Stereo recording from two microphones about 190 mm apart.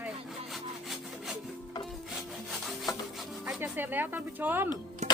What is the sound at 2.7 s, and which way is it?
Rub, centre (ahead or behind).